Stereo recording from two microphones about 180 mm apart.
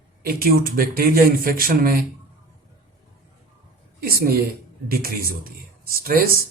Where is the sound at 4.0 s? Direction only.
55° right (ahead or behind).